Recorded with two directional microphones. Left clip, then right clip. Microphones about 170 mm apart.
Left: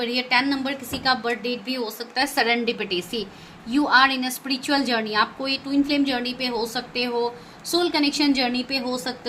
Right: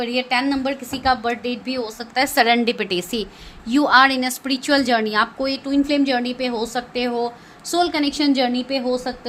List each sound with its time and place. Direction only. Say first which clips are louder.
0.0 s a woman's voice: right 1 dB; 45° right (ahead or behind)